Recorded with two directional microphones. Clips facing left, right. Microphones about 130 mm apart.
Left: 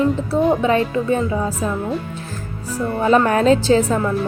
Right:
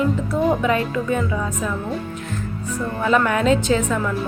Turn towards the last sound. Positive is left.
turn(degrees=35)  # may be behind; listen again after turning